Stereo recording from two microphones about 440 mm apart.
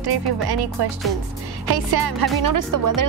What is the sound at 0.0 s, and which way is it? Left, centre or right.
Music, right.